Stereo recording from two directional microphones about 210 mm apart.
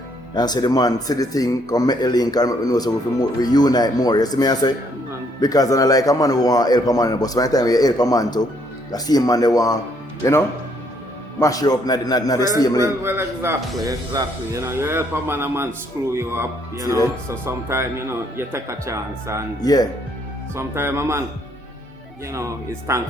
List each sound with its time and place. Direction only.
0.3 s a man's voice: 20° left (ahead or behind)
12.8 s speech: 10° right (ahead or behind)
19.6 s speech: 20° left (ahead or behind)
20.6 s speech: 10° right (ahead or behind)
22.3 s speech: 15° right (ahead or behind)